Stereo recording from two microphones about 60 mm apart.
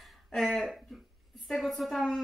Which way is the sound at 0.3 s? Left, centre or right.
Centre.